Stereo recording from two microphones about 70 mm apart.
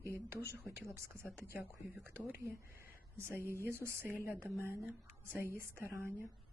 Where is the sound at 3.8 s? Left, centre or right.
Centre.